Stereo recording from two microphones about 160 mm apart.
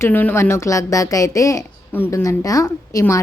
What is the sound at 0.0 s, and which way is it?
A woman's voice, 10° left (ahead or behind).